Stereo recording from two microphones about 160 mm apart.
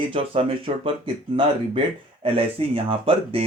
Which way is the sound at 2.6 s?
35° right (ahead or behind).